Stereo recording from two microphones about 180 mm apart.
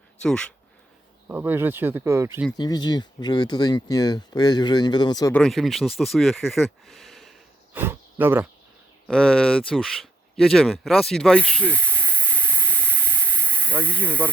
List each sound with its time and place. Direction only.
0.2 s speech: 5° left (ahead or behind)
1.3 s speech: 10° right (ahead or behind)
2.6 s speech: 25° left (ahead or behind)
5.3 s speech: centre (ahead or behind)
7.7 s speech: 10° right (ahead or behind)
9.0 s speech: 5° left (ahead or behind)
11.7 s a sound: 10° left (ahead or behind)
13.8 s speech: 10° left (ahead or behind)